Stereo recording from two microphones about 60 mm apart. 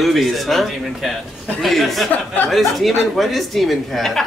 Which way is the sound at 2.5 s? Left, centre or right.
Centre.